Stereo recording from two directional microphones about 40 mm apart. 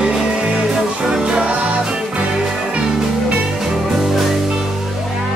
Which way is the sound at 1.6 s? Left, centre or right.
Right.